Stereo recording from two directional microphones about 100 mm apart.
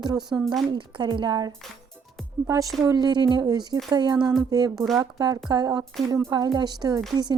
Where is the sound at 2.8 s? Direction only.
45° right (ahead or behind).